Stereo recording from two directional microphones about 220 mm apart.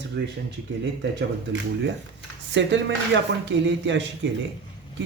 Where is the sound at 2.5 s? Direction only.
55° right (ahead or behind).